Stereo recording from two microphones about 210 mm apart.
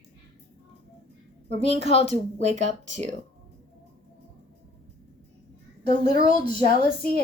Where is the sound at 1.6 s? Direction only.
30° right (ahead or behind).